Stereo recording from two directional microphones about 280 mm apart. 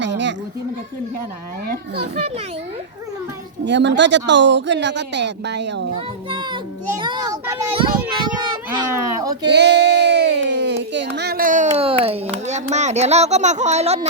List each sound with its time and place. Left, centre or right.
0.0 s children playing: right
3.6 s speech: right
7.0 s a child's voice: centre
8.4 s a child's voice: centre
9.4 s a sound: right; by 12.2 s centre
12.5 s speech: right